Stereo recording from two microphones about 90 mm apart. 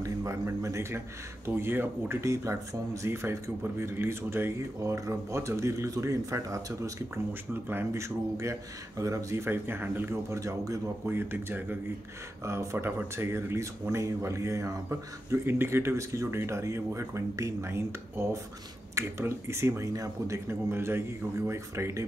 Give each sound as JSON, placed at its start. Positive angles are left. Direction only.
{"t": 0.0, "sound": "speech", "side_deg": -35}
{"t": 10.4, "sound": "speech", "side_deg": -40}
{"t": 11.1, "sound": "speech", "side_deg": -25}